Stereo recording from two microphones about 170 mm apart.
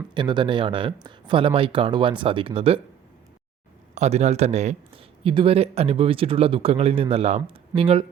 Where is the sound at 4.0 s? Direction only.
40° right (ahead or behind).